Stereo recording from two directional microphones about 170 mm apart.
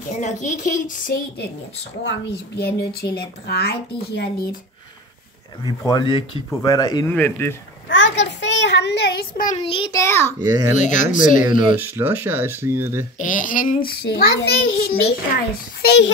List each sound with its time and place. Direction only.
0.1 s a woman's voice: 45° left (ahead or behind)
2.0 s a woman's voice: 80° left
5.9 s speech: 25° left (ahead or behind)
7.2 s speech: 10° left (ahead or behind)
7.9 s a sound: 90° left
9.6 s a child's voice: 30° left (ahead or behind)
10.0 s speech: 15° left (ahead or behind)
10.7 s a woman's voice: 45° left (ahead or behind)
11.8 s speech: 10° right (ahead or behind)
13.2 s a woman's voice: 50° left (ahead or behind)
13.8 s a child's voice: 70° left (ahead or behind)